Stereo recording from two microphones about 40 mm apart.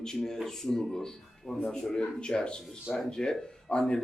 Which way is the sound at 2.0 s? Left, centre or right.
Left.